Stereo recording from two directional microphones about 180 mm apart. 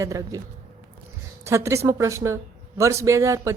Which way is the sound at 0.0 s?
20° right (ahead or behind).